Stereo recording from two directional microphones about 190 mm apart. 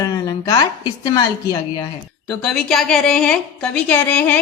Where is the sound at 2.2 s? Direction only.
5° left (ahead or behind).